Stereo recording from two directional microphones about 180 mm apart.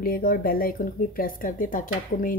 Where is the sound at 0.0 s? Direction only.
50° left (ahead or behind).